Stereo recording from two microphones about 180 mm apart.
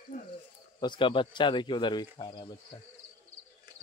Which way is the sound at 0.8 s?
25° left (ahead or behind).